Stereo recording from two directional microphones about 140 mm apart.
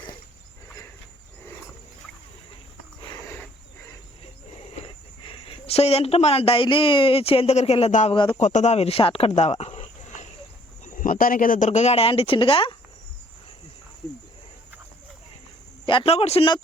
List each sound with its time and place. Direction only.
4.8 s speech: 40° left (ahead or behind)
10.8 s speech: 70° left (ahead or behind); by 12.7 s 40° left (ahead or behind)
15.9 s a man's voice: 40° left (ahead or behind)